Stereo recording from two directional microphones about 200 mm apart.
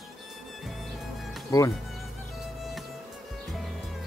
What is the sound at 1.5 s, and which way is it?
Speech, 15° left (ahead or behind).